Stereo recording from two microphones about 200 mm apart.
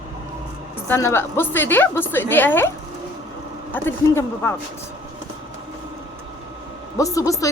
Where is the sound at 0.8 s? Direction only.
10° left (ahead or behind).